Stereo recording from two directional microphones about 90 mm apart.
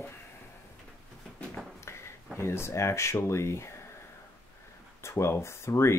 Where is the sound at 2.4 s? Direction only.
30° left (ahead or behind).